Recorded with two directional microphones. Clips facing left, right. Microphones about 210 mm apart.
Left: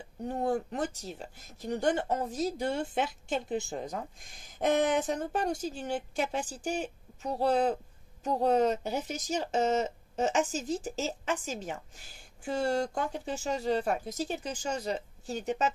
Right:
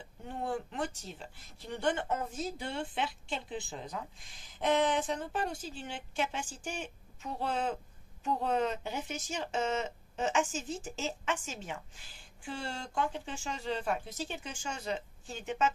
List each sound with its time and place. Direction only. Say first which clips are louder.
0.2 s speech: left 6 dB; 40° left (ahead or behind)